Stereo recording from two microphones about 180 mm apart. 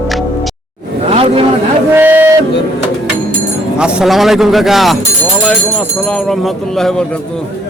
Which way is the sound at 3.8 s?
5° right (ahead or behind).